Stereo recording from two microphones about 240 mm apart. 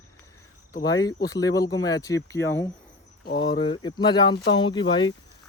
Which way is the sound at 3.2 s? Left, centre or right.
Left.